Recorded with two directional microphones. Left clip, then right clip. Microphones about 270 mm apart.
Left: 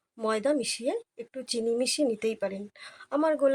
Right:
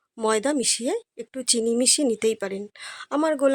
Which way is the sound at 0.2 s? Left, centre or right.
Right.